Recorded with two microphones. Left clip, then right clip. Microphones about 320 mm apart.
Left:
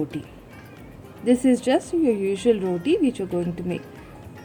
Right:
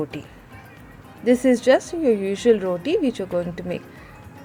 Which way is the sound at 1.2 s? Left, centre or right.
Centre.